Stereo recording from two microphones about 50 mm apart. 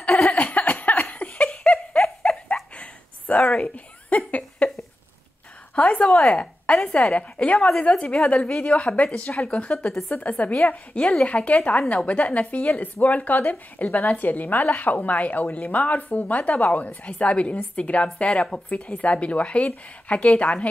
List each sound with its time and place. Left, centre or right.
0.2 s a sound: left
5.8 s speech: left
7.5 s speech: centre
8.2 s speech: left
9.8 s speech: centre
10.2 s speech: left